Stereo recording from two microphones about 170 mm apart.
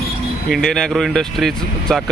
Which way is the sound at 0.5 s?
5° left (ahead or behind).